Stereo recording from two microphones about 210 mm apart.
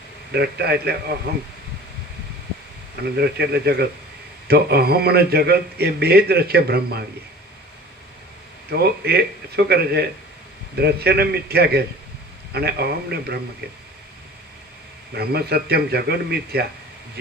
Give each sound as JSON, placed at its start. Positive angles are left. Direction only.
{"t": 0.3, "sound": "speech", "side_deg": -50}
{"t": 3.2, "sound": "speech", "side_deg": -50}
{"t": 8.7, "sound": "speech", "side_deg": -50}
{"t": 15.1, "sound": "speech", "side_deg": -50}